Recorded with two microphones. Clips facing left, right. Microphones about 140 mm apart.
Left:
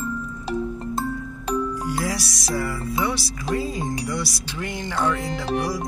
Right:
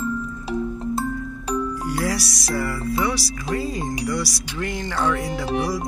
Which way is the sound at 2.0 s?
15° left (ahead or behind).